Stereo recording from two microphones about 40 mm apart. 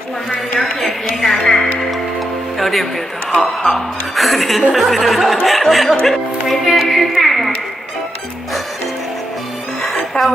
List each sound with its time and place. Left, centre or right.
0.6 s a woman's voice: centre
4.1 s a woman's voice: centre
9.8 s music: centre